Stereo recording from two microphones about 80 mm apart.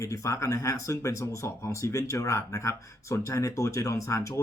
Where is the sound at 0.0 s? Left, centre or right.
Left.